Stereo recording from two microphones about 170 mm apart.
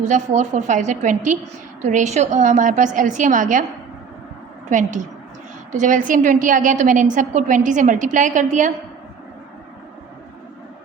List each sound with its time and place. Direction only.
0.0 s a woman's voice: 45° right (ahead or behind)
4.7 s a woman's voice: 45° right (ahead or behind)